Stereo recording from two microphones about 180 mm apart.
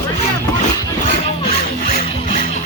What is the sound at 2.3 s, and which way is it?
Music, 50° left (ahead or behind).